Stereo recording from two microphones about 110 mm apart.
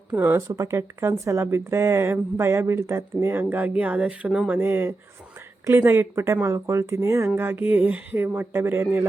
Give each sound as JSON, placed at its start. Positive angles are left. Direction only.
{"t": 0.2, "sound": "speech", "side_deg": -25}